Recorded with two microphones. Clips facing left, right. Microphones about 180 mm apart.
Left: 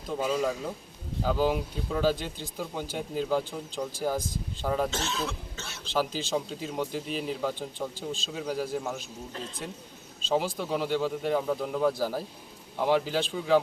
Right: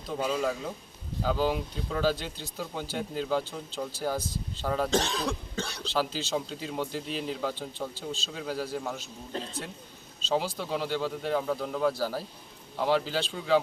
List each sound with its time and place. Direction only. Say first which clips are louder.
0.1 s a man's voice: left 1 dB; 5° left (ahead or behind)
4.6 s speech: left 1 dB; 10° left (ahead or behind)
4.9 s speech: right 4 dB; 35° right (ahead or behind)
5.9 s speech: left 2 dB; 15° left (ahead or behind)
6.3 s a man's voice: left 1 dB; centre (ahead or behind)
10.3 s speech: left 2 dB; 10° left (ahead or behind)